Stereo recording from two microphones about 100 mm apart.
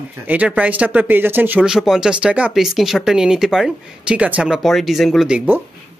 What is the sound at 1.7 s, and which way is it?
Speech, 5° right (ahead or behind).